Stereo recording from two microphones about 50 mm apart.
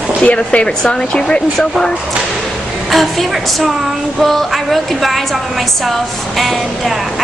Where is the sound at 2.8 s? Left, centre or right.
Centre.